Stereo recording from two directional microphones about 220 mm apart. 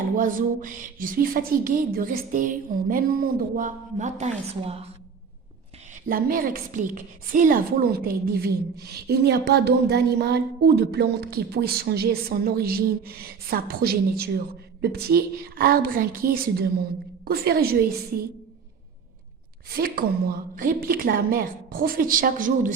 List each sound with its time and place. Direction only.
0.2 s a woman's voice: 35° right (ahead or behind)
5.9 s a woman's voice: 40° right (ahead or behind)
19.7 s a woman's voice: 45° right (ahead or behind)